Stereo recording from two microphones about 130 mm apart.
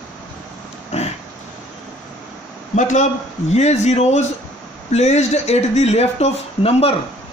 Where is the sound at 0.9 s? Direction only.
55° left (ahead or behind).